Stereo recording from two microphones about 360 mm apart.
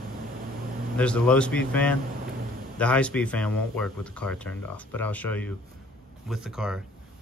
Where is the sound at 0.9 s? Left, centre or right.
Centre.